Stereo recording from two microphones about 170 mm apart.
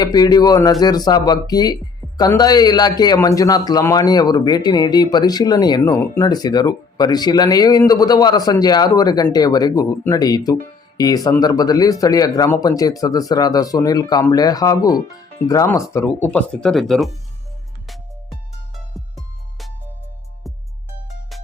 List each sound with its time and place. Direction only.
0.0 s speech: 25° left (ahead or behind)
16.3 s speech: 5° left (ahead or behind)
19.1 s music: centre (ahead or behind)